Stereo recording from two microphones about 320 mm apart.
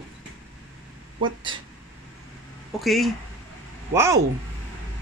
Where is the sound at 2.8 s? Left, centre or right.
Centre.